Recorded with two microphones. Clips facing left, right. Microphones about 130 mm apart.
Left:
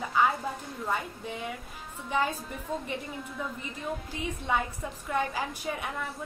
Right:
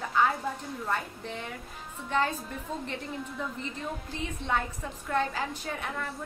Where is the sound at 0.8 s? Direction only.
5° left (ahead or behind).